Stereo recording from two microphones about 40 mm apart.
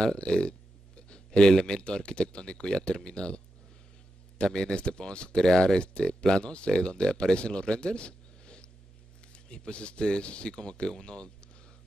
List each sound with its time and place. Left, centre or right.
0.0 s speech: left